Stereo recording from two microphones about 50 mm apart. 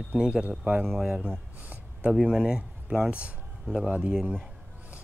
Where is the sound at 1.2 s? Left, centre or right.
Right.